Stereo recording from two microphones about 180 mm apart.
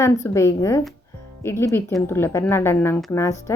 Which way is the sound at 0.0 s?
15° left (ahead or behind).